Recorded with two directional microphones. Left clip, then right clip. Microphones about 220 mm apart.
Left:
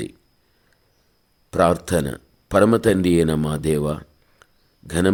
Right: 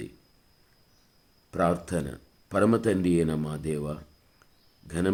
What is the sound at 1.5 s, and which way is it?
Speech, 40° left (ahead or behind).